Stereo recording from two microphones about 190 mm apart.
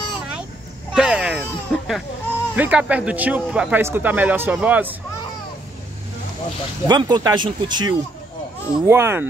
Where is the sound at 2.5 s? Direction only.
10° right (ahead or behind).